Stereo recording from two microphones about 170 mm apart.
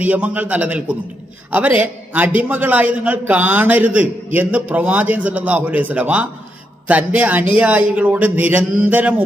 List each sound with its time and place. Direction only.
0.0 s a man's voice: 10° right (ahead or behind)